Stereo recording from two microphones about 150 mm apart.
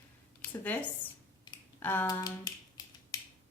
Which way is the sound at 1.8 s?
15° left (ahead or behind).